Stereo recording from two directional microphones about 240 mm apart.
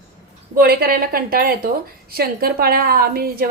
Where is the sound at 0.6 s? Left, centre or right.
Right.